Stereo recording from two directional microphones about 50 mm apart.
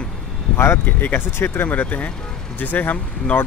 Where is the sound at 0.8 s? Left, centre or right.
Left.